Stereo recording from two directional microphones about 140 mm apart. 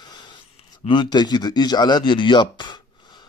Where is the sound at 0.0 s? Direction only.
30° left (ahead or behind).